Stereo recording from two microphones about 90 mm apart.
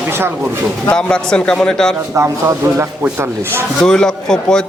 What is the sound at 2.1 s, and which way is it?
Speech, 35° right (ahead or behind).